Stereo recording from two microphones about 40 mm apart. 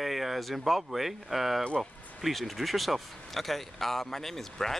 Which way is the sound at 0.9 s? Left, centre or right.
Centre.